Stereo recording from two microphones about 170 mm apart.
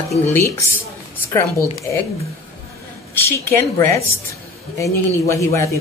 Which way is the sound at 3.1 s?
15° left (ahead or behind).